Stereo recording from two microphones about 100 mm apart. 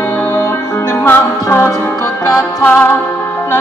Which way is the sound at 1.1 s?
25° left (ahead or behind).